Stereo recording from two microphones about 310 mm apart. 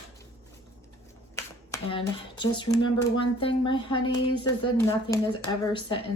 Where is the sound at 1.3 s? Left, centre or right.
Centre.